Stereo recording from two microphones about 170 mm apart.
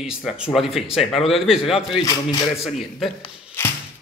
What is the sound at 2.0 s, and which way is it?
Speech, 20° left (ahead or behind).